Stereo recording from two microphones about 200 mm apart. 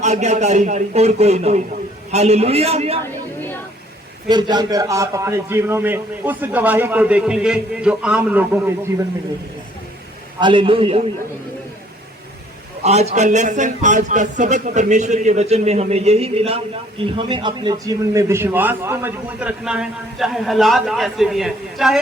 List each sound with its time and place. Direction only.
0.0 s a man's voice: 35° right (ahead or behind)
4.3 s a man's voice: 20° right (ahead or behind)
10.4 s a man's voice: 25° right (ahead or behind)
12.8 s a man's voice: 35° right (ahead or behind); by 21.9 s centre (ahead or behind)